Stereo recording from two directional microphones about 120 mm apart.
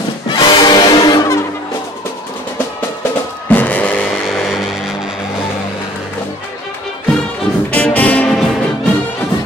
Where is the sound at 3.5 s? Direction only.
10° left (ahead or behind).